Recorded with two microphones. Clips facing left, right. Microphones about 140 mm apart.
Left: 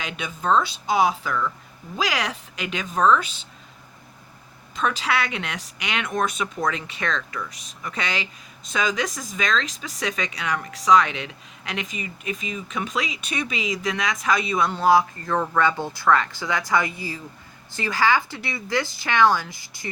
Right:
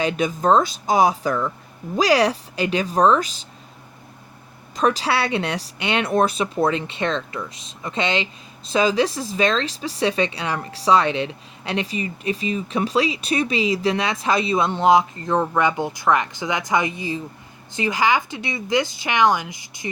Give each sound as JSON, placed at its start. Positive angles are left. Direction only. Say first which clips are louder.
{"t": 0.0, "sound": "speech", "louder": "right 9 dB", "side_deg": -35}
{"t": 4.8, "sound": "speech", "louder": "right 4 dB", "side_deg": -35}